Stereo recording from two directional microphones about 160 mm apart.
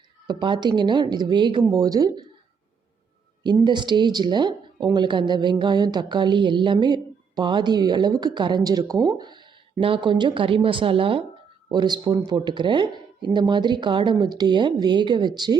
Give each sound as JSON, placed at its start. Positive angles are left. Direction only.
{"t": 0.3, "sound": "a woman's voice", "side_deg": -30}
{"t": 3.4, "sound": "a woman's voice", "side_deg": -30}